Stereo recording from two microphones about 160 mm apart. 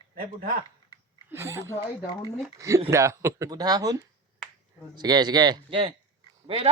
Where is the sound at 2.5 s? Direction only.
20° right (ahead or behind).